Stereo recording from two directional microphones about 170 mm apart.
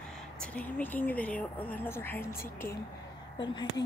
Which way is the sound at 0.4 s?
10° left (ahead or behind).